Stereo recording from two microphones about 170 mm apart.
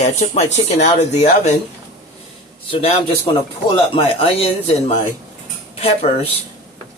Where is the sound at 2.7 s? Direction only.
35° left (ahead or behind).